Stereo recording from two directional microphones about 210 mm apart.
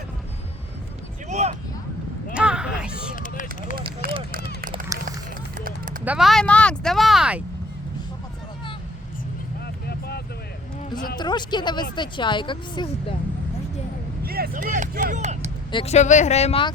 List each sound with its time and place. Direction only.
1.3 s a sound: 30° right (ahead or behind)
2.3 s a sound: 5° right (ahead or behind)
3.2 s run: 40° left (ahead or behind)
4.9 s run: 15° right (ahead or behind)
5.5 s a sound: 40° right (ahead or behind)
6.1 s speech: centre (ahead or behind)
9.8 s vehicle: 50° left (ahead or behind)
11.2 s speech: 20° left (ahead or behind)
14.3 s speech: 45° right (ahead or behind)
15.7 s speech: 30° left (ahead or behind)